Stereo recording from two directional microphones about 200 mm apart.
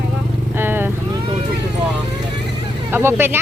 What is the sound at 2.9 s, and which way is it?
Speech, 10° right (ahead or behind).